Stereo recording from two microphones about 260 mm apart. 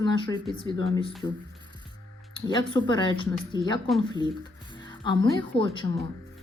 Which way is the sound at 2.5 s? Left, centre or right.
Centre.